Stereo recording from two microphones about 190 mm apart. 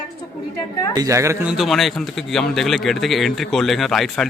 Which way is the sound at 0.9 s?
15° right (ahead or behind).